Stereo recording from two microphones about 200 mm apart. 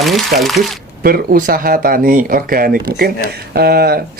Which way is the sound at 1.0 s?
45° right (ahead or behind).